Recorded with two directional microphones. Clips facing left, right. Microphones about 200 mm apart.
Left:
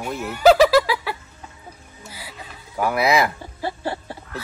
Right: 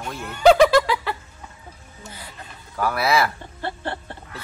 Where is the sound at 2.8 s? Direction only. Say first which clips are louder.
Left 2 dB; 15° left (ahead or behind).